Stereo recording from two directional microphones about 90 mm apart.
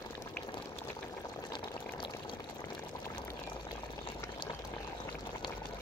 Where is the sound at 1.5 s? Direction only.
60° left (ahead or behind).